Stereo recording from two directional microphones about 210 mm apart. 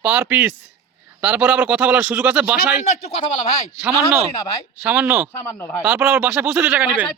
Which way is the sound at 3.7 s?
5° right (ahead or behind).